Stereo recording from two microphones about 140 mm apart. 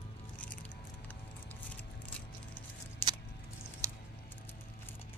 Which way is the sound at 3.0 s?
15° left (ahead or behind).